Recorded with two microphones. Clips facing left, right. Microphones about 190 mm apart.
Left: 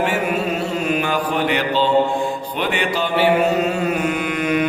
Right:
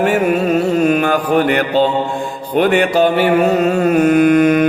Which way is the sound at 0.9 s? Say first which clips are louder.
Right 6 dB; 50° right (ahead or behind).